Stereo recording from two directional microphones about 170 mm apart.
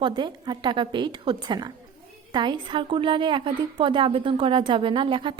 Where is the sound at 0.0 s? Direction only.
25° right (ahead or behind).